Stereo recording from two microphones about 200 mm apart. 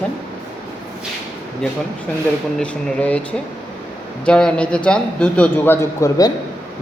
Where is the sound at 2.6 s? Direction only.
5° left (ahead or behind).